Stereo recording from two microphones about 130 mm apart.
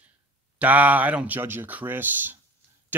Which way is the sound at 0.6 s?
10° right (ahead or behind).